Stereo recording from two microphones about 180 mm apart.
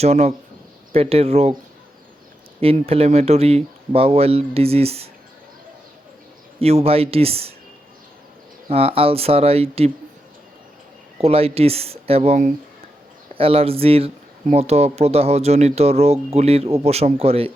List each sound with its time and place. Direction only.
0.0 s speech: 35° right (ahead or behind)
2.6 s speech: 30° right (ahead or behind)
6.6 s speech: 35° right (ahead or behind)
8.7 s speech: 30° right (ahead or behind)
11.2 s speech: 35° right (ahead or behind)